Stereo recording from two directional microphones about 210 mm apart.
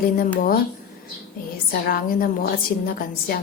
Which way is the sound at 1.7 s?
45° left (ahead or behind).